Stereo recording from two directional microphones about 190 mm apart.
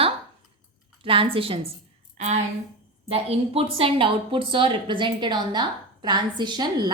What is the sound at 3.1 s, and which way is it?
Speech, 30° right (ahead or behind).